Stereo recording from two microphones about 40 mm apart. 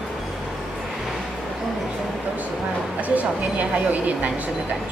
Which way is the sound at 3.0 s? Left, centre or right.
Right.